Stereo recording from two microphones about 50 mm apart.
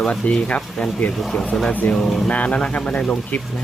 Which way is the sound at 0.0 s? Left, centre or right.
Centre.